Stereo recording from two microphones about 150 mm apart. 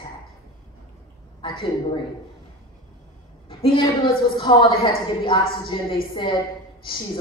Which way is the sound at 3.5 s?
35° left (ahead or behind).